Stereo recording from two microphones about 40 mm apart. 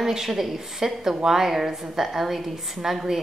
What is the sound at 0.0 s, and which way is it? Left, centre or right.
A woman's voice, centre.